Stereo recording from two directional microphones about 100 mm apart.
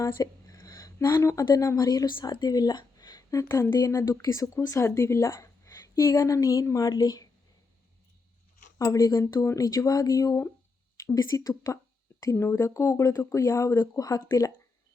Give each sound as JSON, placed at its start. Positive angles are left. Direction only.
{"t": 0.0, "sound": "a sound", "side_deg": 35}
{"t": 1.5, "sound": "speech", "side_deg": 35}
{"t": 2.0, "sound": "speech", "side_deg": 45}
{"t": 8.8, "sound": "speech", "side_deg": 35}